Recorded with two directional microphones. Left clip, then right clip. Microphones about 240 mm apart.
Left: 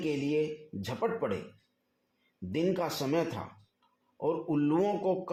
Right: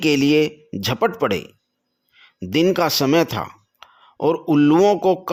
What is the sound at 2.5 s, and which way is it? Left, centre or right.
Speech, right.